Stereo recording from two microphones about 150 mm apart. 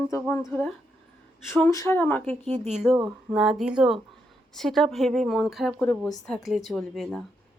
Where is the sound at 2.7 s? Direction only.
5° right (ahead or behind).